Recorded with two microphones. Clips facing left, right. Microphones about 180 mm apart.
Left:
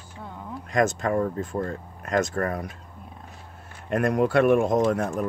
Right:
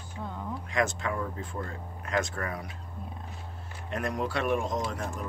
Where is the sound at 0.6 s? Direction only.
45° left (ahead or behind).